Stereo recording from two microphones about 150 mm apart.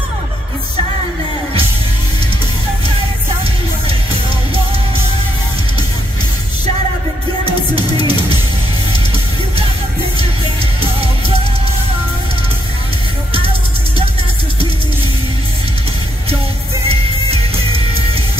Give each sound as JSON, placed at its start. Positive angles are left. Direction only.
{"t": 8.0, "sound": "drum kit", "side_deg": 30}
{"t": 10.8, "sound": "music", "side_deg": -40}
{"t": 16.8, "sound": "music", "side_deg": -40}